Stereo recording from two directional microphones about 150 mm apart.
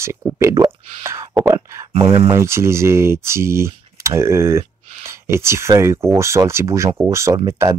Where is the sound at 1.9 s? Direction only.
35° right (ahead or behind).